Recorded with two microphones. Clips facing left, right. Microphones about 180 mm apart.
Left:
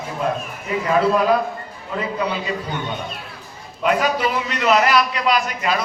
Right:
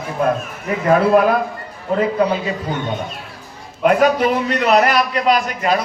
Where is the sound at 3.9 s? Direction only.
50° right (ahead or behind).